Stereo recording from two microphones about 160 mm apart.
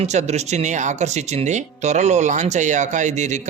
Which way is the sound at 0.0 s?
45° right (ahead or behind).